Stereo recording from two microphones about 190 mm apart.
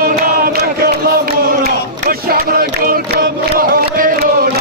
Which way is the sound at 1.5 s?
50° right (ahead or behind).